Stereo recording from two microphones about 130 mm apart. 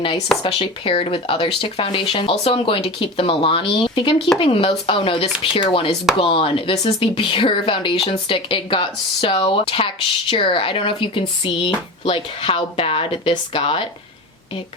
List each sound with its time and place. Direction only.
0.4 s speech: 45° left (ahead or behind)